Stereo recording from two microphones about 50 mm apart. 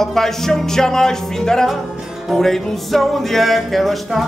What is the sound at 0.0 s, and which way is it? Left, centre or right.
Music, centre.